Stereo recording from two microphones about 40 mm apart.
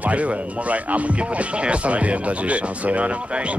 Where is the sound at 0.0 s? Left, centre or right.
Right.